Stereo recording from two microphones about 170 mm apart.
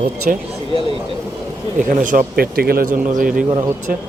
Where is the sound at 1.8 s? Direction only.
50° right (ahead or behind).